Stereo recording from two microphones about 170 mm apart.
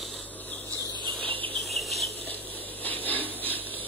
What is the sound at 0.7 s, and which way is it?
Cricket, 25° right (ahead or behind).